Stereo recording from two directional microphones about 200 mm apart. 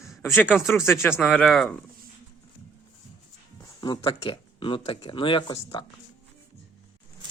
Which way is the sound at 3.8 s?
25° left (ahead or behind).